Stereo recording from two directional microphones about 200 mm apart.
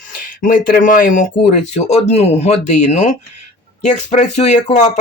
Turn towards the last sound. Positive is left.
turn(degrees=35)  # may be behind; listen again after turning